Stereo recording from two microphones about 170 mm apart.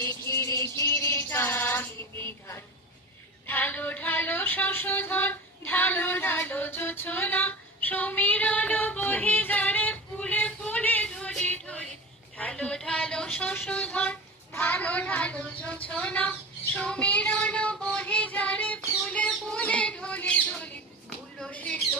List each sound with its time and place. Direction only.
0.8 s a sound: 15° left (ahead or behind)
1.1 s child singing: 15° left (ahead or behind)
3.4 s a sound: 10° left (ahead or behind)
12.4 s speech: 5° left (ahead or behind)
16.7 s child singing: 5° left (ahead or behind)
21.3 s squawk: 5° left (ahead or behind)